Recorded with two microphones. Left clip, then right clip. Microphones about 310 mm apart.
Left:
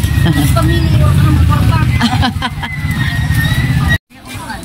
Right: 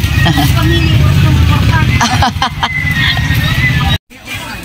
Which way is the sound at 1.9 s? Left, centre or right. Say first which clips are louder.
Right 5 dB; centre.